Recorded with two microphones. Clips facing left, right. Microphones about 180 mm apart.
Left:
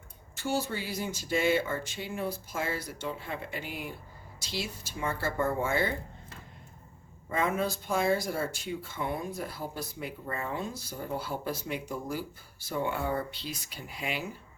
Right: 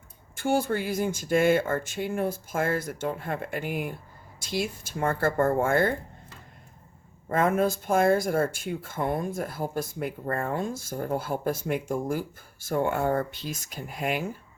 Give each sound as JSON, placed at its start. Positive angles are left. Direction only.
{"t": 0.3, "sound": "speech", "side_deg": -55}
{"t": 7.3, "sound": "speech", "side_deg": -50}